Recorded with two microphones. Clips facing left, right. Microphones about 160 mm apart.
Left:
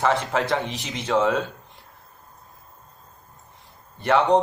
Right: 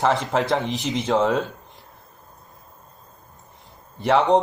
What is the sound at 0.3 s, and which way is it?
Speech, centre (ahead or behind).